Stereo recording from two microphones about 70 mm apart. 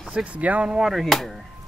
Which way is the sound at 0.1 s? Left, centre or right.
Centre.